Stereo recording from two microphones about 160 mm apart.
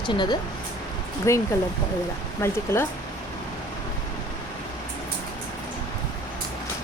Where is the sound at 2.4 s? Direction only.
15° left (ahead or behind).